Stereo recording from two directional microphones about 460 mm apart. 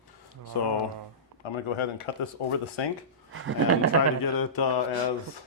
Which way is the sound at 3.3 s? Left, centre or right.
Right.